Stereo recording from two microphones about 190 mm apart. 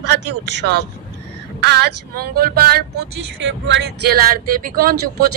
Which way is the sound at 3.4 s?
70° right (ahead or behind).